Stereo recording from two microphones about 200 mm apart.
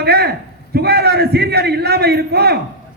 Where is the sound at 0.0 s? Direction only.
50° right (ahead or behind).